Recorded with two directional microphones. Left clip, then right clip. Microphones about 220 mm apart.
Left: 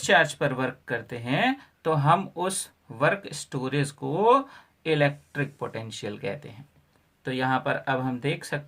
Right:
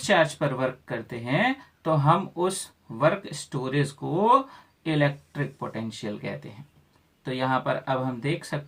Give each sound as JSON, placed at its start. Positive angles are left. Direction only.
{"t": 0.0, "sound": "speech", "side_deg": 40}